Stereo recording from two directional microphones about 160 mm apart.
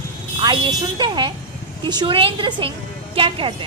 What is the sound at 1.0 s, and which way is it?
A woman's voice, 25° right (ahead or behind).